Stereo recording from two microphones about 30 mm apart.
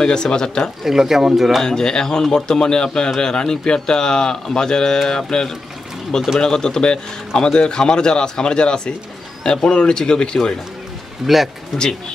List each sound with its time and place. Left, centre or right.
0.0 s speech: left
0.8 s speech: centre
1.6 s speech: left
11.2 s speech: centre